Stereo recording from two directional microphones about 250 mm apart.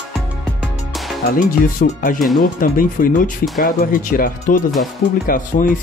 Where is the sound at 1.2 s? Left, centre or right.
Left.